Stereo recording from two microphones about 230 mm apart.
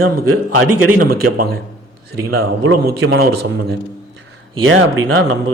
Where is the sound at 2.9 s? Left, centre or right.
Right.